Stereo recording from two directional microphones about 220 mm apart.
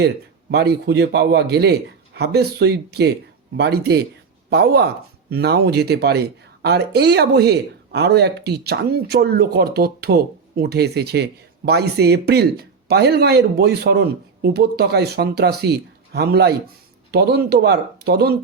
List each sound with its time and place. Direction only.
0.5 s speech: 50° right (ahead or behind)